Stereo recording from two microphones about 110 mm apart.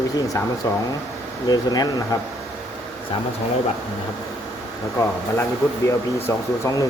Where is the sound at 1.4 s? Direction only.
35° left (ahead or behind).